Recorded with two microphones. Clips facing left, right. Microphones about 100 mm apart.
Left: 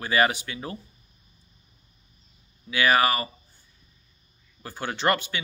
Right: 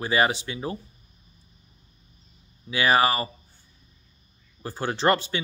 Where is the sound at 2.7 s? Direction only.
25° right (ahead or behind).